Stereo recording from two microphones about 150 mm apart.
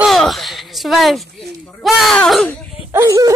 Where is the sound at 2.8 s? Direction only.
20° right (ahead or behind).